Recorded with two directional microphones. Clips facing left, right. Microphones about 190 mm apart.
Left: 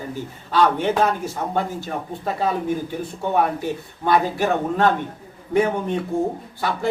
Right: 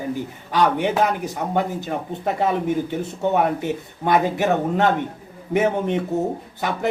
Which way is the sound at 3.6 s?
20° right (ahead or behind).